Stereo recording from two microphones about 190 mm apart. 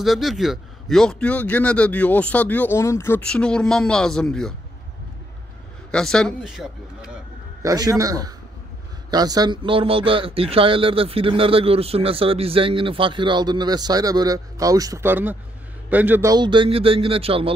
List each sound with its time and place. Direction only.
0.0 s a man's voice: centre (ahead or behind)
5.9 s a man's voice: 5° left (ahead or behind)
7.6 s speech: 20° right (ahead or behind)